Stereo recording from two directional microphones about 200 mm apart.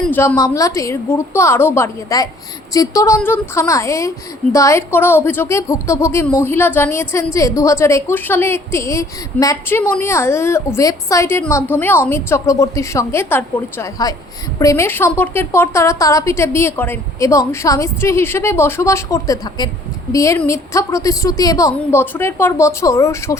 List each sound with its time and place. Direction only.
0.0 s a woman's voice: 10° left (ahead or behind)